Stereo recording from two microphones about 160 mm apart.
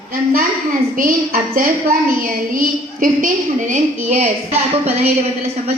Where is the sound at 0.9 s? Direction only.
60° right (ahead or behind); by 4.6 s 45° right (ahead or behind).